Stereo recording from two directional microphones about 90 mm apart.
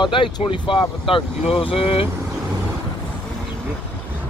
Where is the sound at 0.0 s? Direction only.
70° left (ahead or behind); by 2.0 s 90° left.